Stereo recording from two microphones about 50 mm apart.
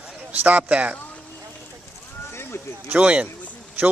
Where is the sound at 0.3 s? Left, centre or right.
Right.